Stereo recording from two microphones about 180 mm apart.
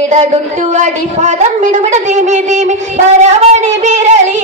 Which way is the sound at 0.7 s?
40° right (ahead or behind).